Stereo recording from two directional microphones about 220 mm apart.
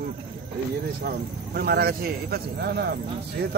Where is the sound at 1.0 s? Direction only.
45° right (ahead or behind).